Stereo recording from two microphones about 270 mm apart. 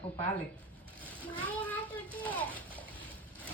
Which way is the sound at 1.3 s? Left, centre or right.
Centre.